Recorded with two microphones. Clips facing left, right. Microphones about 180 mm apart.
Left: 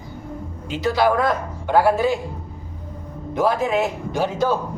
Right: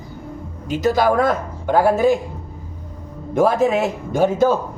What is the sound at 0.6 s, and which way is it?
A woman's voice, 45° right (ahead or behind).